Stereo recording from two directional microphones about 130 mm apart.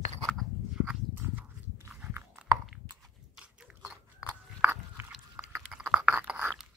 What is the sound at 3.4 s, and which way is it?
Biting, 5° right (ahead or behind).